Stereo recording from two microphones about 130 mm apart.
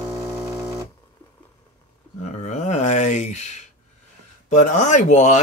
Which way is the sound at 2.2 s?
65° left (ahead or behind).